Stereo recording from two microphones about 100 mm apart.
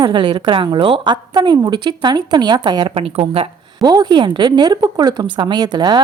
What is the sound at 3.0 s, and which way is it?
Speech, 75° right (ahead or behind).